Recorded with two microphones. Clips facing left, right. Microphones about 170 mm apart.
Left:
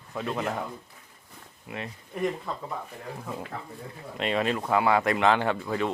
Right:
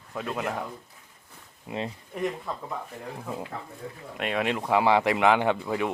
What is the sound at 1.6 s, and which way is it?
Speech, 30° right (ahead or behind).